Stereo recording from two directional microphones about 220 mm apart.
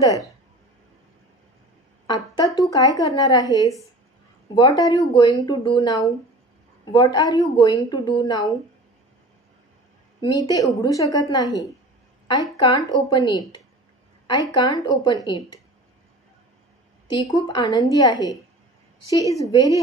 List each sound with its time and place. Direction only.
2.3 s a woman's voice: 15° left (ahead or behind)
10.2 s a woman's voice: 20° left (ahead or behind)
12.5 s speech: 20° left (ahead or behind)
17.1 s a woman's voice: 15° left (ahead or behind)